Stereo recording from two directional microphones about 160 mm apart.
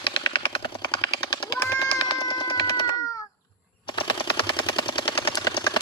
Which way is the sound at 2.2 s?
30° left (ahead or behind).